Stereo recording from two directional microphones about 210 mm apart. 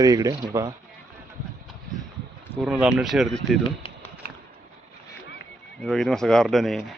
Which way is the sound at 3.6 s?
25° left (ahead or behind).